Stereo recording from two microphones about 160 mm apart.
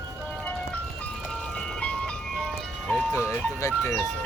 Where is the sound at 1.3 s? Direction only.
5° left (ahead or behind).